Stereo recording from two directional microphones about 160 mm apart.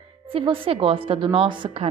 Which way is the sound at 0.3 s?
35° right (ahead or behind).